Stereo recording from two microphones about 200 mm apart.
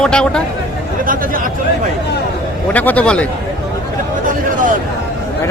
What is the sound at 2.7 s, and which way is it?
Speech, 10° left (ahead or behind).